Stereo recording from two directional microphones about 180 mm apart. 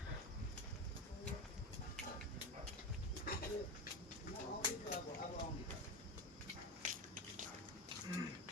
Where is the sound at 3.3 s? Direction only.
55° left (ahead or behind).